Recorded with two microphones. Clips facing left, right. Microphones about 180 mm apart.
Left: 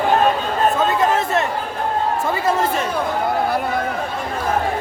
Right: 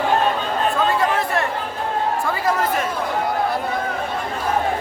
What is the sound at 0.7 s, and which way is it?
Chatter, 20° left (ahead or behind).